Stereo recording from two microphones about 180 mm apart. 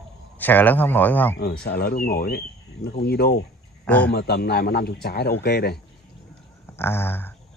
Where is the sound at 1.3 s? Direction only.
60° left (ahead or behind).